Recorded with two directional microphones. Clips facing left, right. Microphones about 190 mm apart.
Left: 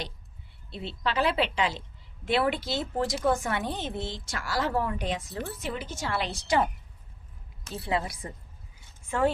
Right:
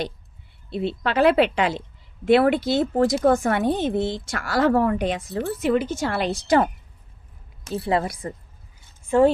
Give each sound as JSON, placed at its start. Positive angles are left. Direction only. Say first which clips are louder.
{"t": 0.7, "sound": "speech", "louder": "right 7 dB", "side_deg": -55}
{"t": 7.9, "sound": "a woman's voice", "louder": "right 6 dB", "side_deg": -50}
{"t": 9.0, "sound": "speech", "louder": "right 9 dB", "side_deg": -30}